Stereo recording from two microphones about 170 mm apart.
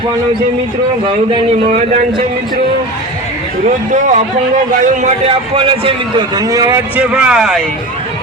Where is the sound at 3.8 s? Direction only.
45° right (ahead or behind); by 7.6 s centre (ahead or behind).